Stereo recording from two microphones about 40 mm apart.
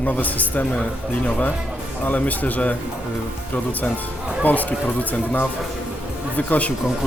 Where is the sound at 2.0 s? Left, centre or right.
Left.